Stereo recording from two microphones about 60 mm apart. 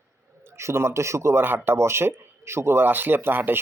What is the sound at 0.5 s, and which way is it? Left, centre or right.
Speech, right.